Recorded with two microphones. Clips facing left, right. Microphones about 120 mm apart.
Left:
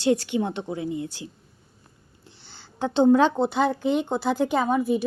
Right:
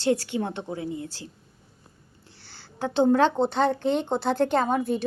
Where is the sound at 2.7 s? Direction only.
20° left (ahead or behind).